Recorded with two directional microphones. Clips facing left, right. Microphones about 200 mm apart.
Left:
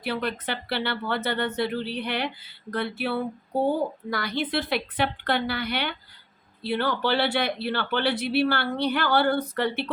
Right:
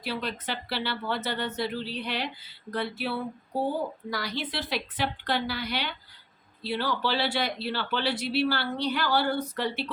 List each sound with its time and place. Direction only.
0.0 s speech: 60° left (ahead or behind)